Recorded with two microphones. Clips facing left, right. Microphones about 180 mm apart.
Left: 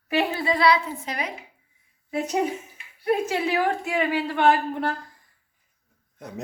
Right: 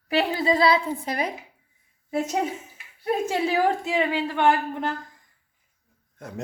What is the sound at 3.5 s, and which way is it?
A woman's voice, 20° right (ahead or behind).